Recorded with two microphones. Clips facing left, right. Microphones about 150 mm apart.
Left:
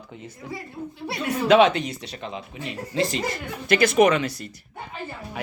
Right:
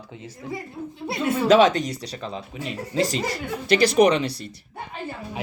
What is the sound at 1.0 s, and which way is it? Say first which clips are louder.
Speech: right 3 dB; 25° right (ahead or behind).